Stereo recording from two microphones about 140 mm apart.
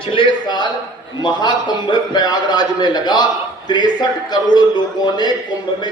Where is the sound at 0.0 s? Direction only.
40° left (ahead or behind).